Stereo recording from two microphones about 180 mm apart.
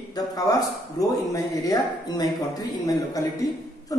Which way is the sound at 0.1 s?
20° left (ahead or behind).